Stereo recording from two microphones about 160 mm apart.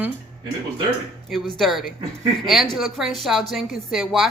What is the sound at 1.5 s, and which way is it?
Speech, centre (ahead or behind).